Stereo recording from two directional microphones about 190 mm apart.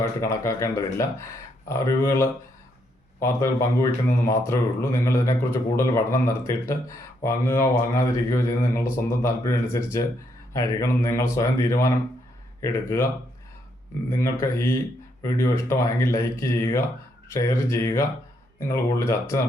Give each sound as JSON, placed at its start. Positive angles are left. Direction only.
{"t": 0.0, "sound": "speech", "side_deg": 15}
{"t": 14.1, "sound": "speech", "side_deg": 15}